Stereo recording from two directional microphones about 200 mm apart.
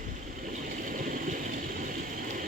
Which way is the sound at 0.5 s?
40° right (ahead or behind).